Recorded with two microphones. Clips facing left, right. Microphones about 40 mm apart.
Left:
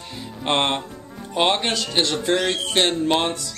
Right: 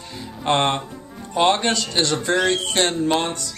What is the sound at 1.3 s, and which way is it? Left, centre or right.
Speech, centre.